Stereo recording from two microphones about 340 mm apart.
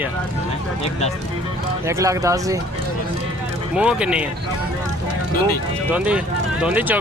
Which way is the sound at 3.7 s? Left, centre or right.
Centre.